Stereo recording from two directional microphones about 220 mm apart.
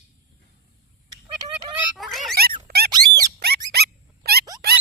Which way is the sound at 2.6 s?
45° right (ahead or behind).